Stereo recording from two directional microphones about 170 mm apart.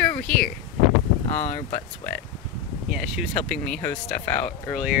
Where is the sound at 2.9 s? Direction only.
5° right (ahead or behind).